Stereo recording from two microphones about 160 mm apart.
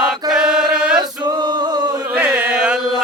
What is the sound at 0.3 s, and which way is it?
Chant, 5° right (ahead or behind).